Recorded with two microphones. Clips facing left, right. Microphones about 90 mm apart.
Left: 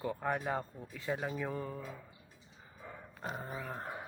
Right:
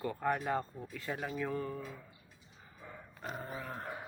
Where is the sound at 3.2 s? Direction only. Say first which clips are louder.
Left 1 dB; 15° left (ahead or behind).